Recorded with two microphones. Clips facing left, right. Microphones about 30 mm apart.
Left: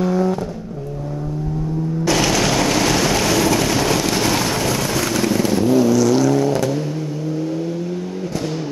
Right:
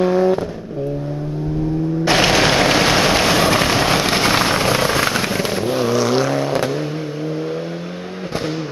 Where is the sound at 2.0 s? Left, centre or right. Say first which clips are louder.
Right 3 dB; right.